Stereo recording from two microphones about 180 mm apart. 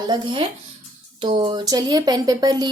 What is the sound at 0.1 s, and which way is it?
A woman's voice, 25° right (ahead or behind).